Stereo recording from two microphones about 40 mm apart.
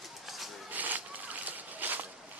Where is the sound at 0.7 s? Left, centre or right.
Right.